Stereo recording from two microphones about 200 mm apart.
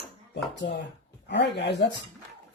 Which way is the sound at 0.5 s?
65° left (ahead or behind).